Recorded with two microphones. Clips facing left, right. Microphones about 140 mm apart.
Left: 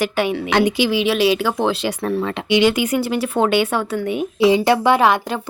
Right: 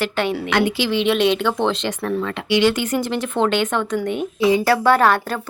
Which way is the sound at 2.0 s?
25° left (ahead or behind).